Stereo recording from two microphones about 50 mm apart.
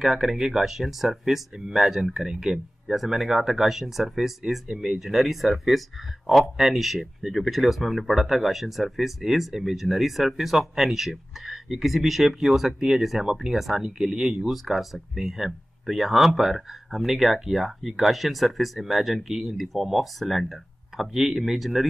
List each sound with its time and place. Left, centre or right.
0.0 s speech: centre